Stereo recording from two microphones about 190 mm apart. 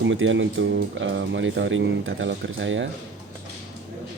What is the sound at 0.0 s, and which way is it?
Speech, 85° right.